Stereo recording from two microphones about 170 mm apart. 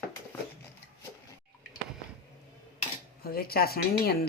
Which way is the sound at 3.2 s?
65° left (ahead or behind).